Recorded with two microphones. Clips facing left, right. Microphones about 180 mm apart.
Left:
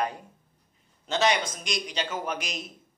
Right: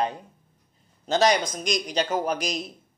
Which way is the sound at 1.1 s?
40° right (ahead or behind).